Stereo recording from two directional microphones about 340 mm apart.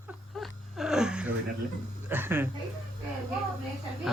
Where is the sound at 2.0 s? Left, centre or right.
Centre.